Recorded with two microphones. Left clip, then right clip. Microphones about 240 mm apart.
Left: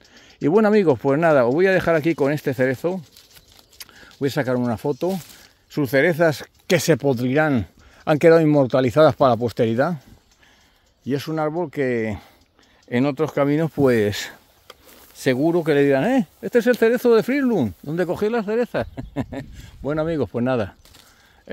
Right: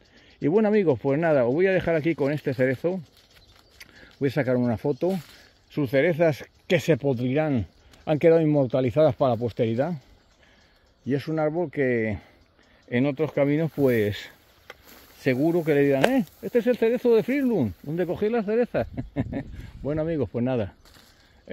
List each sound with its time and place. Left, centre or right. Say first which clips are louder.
0.1 s speech: left 5 dB; left
5.7 s speech: left 4 dB; left
11.1 s speech: left 2 dB; left
15.1 s speech: left 4 dB; left